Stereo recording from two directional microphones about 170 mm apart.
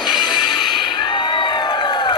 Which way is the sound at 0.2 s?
25° left (ahead or behind).